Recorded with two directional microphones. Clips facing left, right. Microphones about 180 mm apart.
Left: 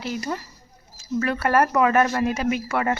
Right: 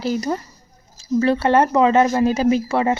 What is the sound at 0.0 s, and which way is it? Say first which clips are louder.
Speech: right 6 dB; 35° right (ahead or behind).